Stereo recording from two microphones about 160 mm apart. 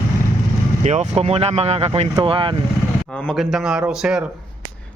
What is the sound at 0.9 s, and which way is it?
Speech, 45° right (ahead or behind).